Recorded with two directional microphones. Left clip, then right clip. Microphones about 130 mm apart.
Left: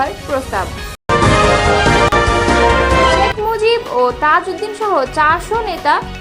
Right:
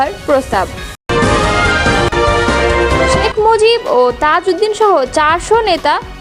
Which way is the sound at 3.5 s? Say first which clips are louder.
Right 5 dB; 65° right (ahead or behind).